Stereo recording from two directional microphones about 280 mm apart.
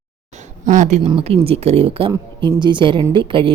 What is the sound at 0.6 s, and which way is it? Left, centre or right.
Speech, right.